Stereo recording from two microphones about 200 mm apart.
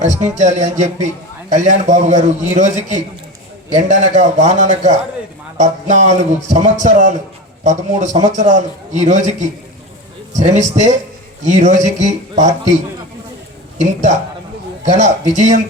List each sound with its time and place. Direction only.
0.0 s a man's voice: 35° right (ahead or behind)
13.7 s a man's voice: 35° right (ahead or behind)